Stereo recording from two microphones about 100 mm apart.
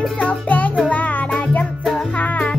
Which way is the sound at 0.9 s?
15° left (ahead or behind).